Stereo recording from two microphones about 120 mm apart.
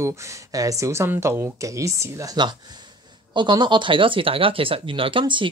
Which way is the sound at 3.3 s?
40° right (ahead or behind).